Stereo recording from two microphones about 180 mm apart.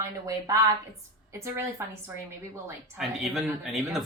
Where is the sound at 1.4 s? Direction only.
15° right (ahead or behind).